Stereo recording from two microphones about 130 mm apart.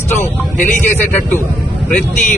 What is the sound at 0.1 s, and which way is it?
Speech, 20° left (ahead or behind).